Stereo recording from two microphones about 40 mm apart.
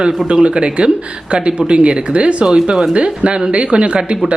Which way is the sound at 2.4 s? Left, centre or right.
Centre.